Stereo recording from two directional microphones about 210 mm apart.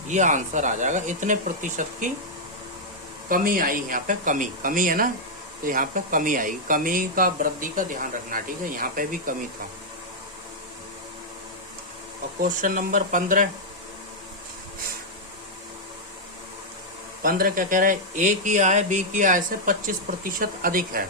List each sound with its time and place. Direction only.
0.1 s speech: 35° right (ahead or behind)
3.2 s speech: 40° right (ahead or behind)
12.4 s speech: 40° right (ahead or behind)
17.2 s speech: 40° right (ahead or behind)